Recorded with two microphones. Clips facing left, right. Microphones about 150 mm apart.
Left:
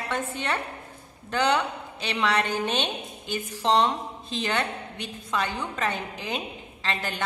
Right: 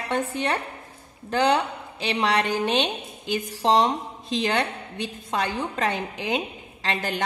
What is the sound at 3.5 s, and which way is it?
Speech, 35° right (ahead or behind).